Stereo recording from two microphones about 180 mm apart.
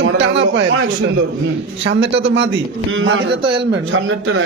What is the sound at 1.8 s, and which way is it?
Speech, 80° right.